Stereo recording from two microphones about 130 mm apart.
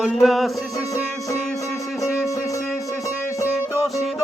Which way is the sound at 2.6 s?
Centre (ahead or behind).